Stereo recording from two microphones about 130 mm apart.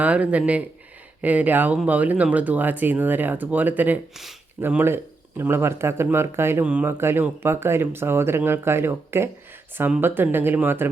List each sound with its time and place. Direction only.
0.0 s speech: 10° right (ahead or behind)